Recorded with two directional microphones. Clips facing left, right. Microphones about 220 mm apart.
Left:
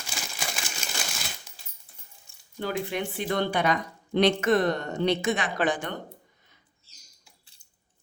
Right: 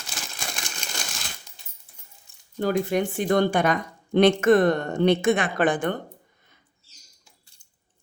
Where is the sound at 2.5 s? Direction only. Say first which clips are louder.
Right 7 dB; 45° right (ahead or behind).